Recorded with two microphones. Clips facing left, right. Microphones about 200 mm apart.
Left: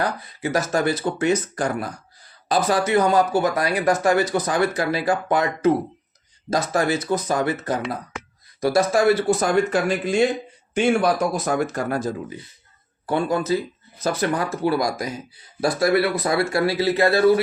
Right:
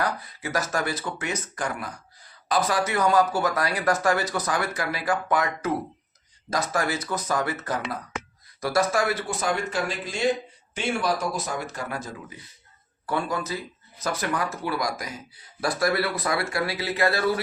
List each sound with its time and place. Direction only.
0.0 s speech: 25° left (ahead or behind)
13.1 s speech: 25° left (ahead or behind)